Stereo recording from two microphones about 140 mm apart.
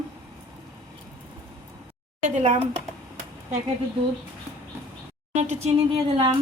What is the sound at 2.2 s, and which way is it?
Speech, 60° right (ahead or behind).